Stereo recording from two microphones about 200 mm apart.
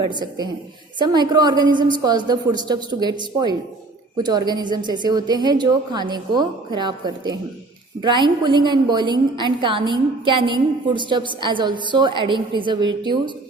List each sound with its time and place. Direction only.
0.0 s a woman's voice: 20° right (ahead or behind)